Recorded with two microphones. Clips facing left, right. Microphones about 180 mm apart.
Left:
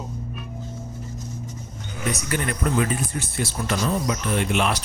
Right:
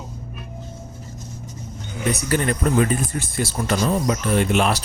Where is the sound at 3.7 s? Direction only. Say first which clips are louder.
Right 4 dB; 40° right (ahead or behind).